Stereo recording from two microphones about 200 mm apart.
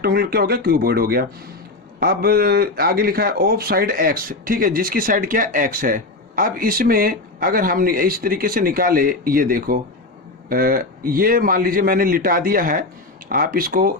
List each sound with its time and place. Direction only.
0.0 s speech: 50° right (ahead or behind)